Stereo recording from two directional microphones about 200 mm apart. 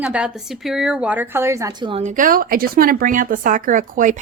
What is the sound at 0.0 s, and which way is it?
A woman's voice, 5° right (ahead or behind).